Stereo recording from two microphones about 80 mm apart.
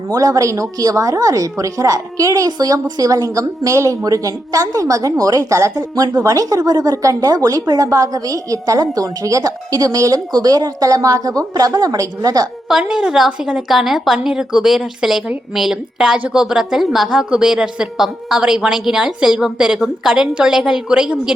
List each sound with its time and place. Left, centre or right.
0.1 s speech: right
12.9 s a woman's voice: centre